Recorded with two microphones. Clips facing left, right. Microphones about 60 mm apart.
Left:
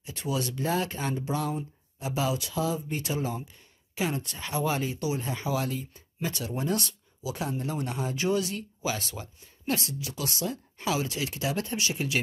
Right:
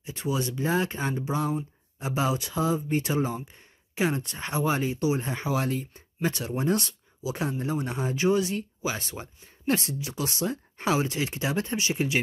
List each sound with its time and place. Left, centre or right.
0.2 s speech: centre
2.0 s speech: right